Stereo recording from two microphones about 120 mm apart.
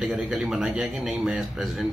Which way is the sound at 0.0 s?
5° right (ahead or behind).